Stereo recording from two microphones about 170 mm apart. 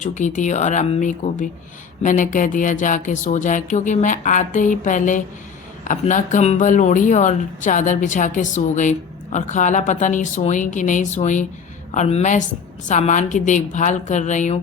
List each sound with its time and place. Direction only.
0.0 s speech: 45° left (ahead or behind)